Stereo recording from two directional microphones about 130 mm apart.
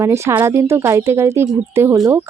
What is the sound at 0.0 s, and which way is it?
Speech, 20° right (ahead or behind).